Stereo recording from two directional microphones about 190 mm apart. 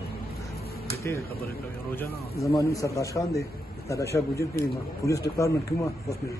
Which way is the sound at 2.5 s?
15° left (ahead or behind).